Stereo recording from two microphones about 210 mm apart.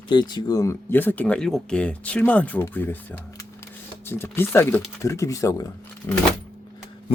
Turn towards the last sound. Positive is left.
turn(degrees=15)  # may be behind; listen again after turning